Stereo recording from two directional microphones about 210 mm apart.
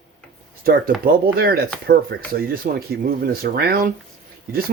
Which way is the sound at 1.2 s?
45° right (ahead or behind).